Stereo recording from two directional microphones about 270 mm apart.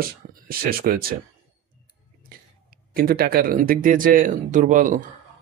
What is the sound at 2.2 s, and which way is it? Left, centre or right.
A man's voice, right.